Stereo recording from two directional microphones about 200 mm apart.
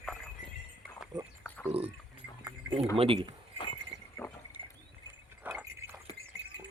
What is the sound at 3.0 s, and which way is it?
Speech, 25° right (ahead or behind).